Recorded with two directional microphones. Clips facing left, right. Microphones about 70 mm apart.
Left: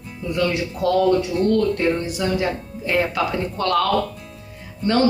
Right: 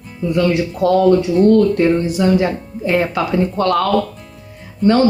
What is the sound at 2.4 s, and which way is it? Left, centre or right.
Speech, right.